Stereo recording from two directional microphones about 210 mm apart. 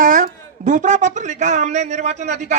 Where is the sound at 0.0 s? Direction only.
40° right (ahead or behind).